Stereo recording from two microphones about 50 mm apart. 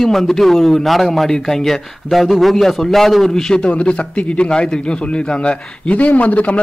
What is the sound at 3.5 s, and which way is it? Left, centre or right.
A man's voice, left.